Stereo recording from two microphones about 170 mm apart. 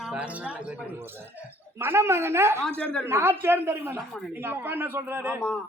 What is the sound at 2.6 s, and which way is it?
Speech, 5° left (ahead or behind).